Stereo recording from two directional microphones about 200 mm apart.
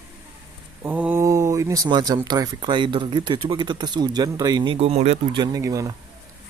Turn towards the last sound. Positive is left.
turn(degrees=-15)  # may be behind; listen again after turning